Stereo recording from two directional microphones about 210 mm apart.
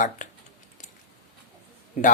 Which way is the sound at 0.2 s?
40° left (ahead or behind).